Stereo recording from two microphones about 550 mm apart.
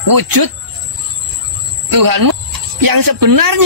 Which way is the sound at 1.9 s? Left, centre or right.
Right.